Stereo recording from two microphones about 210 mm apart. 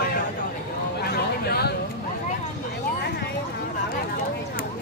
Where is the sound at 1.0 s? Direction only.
50° left (ahead or behind).